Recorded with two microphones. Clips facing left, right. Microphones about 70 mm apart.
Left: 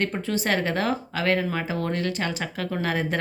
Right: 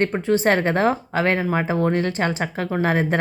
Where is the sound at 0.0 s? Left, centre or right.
Right.